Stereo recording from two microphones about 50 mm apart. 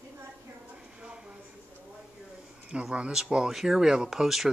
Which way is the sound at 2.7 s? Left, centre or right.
Right.